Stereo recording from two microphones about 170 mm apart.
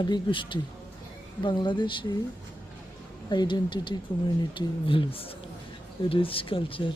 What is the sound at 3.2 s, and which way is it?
Speech, 25° left (ahead or behind).